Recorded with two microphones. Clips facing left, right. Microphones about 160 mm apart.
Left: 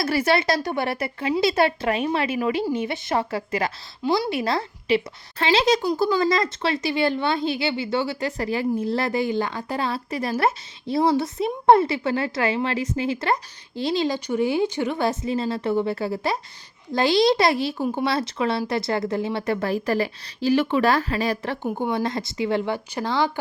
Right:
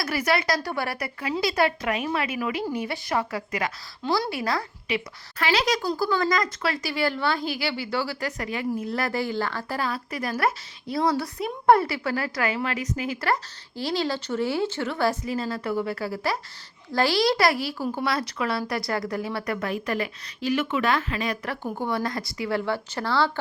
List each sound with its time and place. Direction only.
0.0 s speech: 30° left (ahead or behind)
5.8 s speech: 15° left (ahead or behind)